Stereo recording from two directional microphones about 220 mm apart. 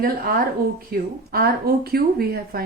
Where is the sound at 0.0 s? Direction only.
40° right (ahead or behind).